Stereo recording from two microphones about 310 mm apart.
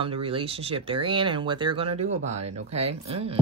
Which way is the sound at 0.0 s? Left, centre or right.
Centre.